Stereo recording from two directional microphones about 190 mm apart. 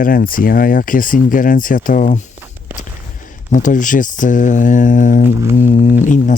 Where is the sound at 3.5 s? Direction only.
40° left (ahead or behind).